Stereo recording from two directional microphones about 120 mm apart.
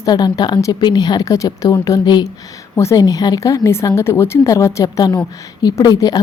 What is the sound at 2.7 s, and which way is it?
A woman's voice, 25° left (ahead or behind).